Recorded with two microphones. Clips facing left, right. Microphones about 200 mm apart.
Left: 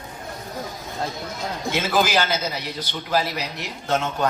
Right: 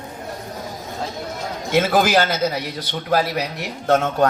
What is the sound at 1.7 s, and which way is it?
Speech, 55° right (ahead or behind).